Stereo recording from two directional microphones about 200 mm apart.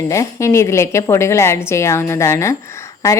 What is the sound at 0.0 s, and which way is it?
A woman's voice, 15° left (ahead or behind).